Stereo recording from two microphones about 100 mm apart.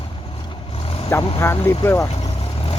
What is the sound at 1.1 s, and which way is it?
Speech, 25° left (ahead or behind).